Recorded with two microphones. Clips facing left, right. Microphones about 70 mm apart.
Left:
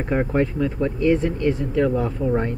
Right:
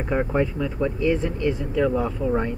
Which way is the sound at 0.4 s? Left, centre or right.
Left.